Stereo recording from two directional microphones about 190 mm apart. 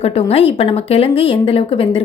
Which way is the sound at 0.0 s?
30° left (ahead or behind).